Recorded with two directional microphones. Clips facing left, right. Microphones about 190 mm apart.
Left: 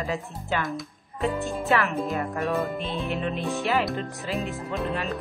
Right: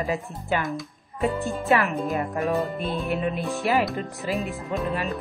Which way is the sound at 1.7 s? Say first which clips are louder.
Right 2 dB; 15° right (ahead or behind).